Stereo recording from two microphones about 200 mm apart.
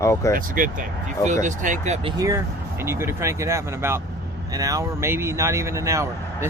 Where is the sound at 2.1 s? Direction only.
15° right (ahead or behind).